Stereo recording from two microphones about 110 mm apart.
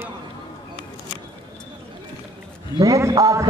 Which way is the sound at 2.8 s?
30° right (ahead or behind).